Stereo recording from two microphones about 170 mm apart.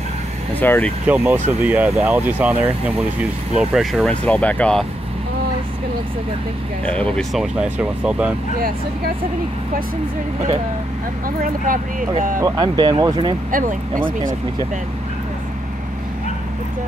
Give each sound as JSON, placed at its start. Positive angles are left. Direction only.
{"t": 0.6, "sound": "speech", "side_deg": 10}
{"t": 1.0, "sound": "speech", "side_deg": -10}
{"t": 6.9, "sound": "speech", "side_deg": 5}
{"t": 11.2, "sound": "speech", "side_deg": -55}
{"t": 12.4, "sound": "speech", "side_deg": -20}
{"t": 13.5, "sound": "speech", "side_deg": -50}